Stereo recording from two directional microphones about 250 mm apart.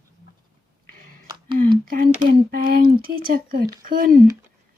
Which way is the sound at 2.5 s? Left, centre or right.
Right.